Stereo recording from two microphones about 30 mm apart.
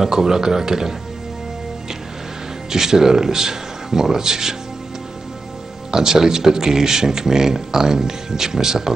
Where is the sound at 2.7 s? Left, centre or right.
Centre.